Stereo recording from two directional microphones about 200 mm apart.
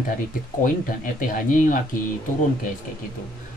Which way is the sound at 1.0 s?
40° left (ahead or behind).